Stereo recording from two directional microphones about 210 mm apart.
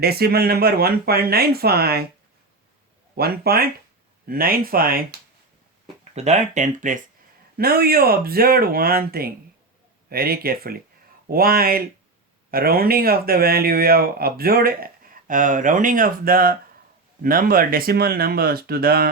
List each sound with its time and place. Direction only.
0.0 s speech: 50° right (ahead or behind)
3.2 s speech: 45° right (ahead or behind)
6.1 s speech: 35° right (ahead or behind)